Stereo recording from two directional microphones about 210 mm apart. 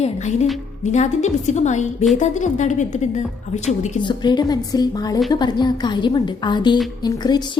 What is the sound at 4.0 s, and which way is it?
A woman's voice, 20° left (ahead or behind).